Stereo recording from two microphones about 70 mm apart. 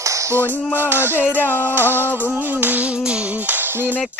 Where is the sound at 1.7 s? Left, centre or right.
Right.